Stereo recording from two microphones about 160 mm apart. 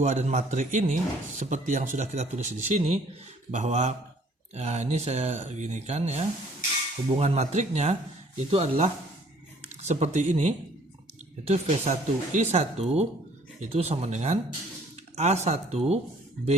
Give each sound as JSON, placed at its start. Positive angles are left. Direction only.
{"t": 0.0, "sound": "speech", "side_deg": -45}